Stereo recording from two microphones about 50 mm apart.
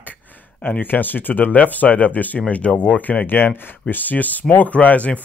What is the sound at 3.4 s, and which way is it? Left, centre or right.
Speech, left.